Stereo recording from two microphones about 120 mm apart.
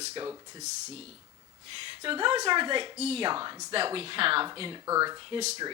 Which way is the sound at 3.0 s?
60° right (ahead or behind).